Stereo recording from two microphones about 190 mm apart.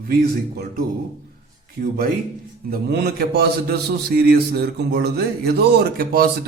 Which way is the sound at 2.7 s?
60° right (ahead or behind).